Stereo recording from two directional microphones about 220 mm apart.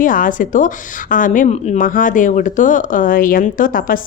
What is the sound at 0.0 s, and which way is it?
Speech, 40° left (ahead or behind).